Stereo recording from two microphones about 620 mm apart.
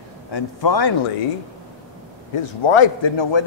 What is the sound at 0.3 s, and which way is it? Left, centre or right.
Speech, left.